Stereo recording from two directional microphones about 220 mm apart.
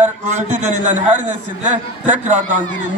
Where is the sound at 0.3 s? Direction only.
35° right (ahead or behind).